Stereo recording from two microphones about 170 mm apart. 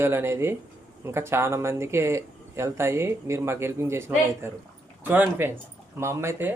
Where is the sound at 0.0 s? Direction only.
15° right (ahead or behind).